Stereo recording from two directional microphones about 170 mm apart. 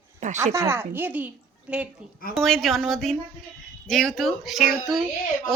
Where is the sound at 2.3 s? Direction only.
5° left (ahead or behind).